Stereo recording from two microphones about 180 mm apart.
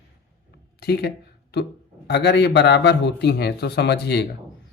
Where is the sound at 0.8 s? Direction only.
65° left (ahead or behind).